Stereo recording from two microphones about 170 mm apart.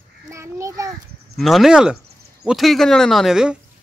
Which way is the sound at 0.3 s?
15° right (ahead or behind).